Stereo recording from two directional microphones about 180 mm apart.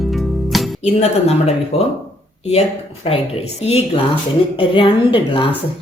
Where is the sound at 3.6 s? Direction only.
35° left (ahead or behind).